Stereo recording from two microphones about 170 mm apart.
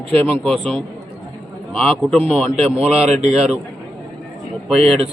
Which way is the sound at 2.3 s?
5° right (ahead or behind).